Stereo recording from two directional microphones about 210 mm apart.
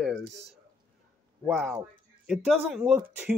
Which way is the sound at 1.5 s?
Centre (ahead or behind).